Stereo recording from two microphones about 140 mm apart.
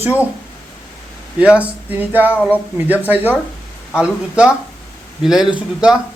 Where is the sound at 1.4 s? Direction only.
10° right (ahead or behind).